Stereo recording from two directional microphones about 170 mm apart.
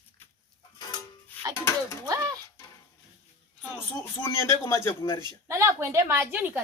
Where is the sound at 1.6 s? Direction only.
15° left (ahead or behind).